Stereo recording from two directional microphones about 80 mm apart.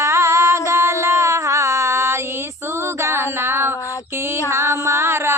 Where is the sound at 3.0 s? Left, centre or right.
Right.